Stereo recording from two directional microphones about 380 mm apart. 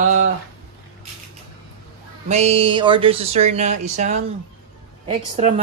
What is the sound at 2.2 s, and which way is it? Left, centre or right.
Speech, centre.